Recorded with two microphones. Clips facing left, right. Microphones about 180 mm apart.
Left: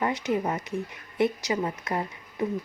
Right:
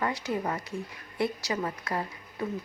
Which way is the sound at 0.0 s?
20° left (ahead or behind).